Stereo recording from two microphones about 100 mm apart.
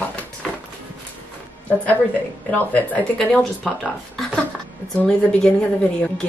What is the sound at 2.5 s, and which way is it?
Speech, 15° left (ahead or behind).